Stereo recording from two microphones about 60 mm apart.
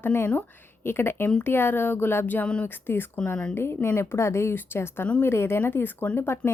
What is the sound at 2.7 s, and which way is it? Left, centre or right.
A woman's voice, left.